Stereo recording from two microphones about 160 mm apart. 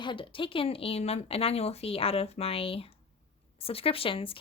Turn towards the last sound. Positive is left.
turn(degrees=35)  # may be behind; listen again after turning